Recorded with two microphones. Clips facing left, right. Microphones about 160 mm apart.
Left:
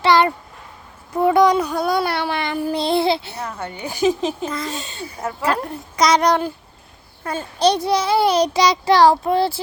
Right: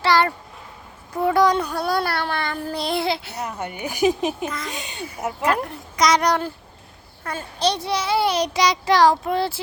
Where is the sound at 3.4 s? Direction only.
15° right (ahead or behind).